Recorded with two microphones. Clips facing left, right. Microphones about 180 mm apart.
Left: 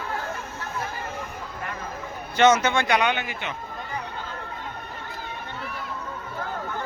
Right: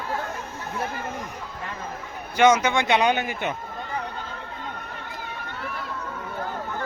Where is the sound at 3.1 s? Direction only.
45° right (ahead or behind).